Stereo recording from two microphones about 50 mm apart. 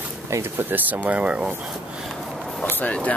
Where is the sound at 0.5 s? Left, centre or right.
Right.